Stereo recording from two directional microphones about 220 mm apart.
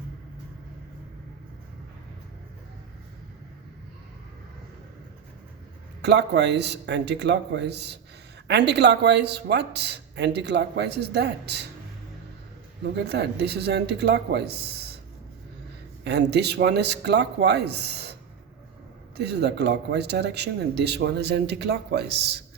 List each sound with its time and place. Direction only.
6.0 s speech: 50° right (ahead or behind)
13.0 s speech: 50° right (ahead or behind)
16.0 s speech: 50° right (ahead or behind)